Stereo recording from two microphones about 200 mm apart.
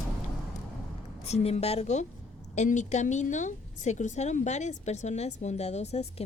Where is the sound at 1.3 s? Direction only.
30° left (ahead or behind).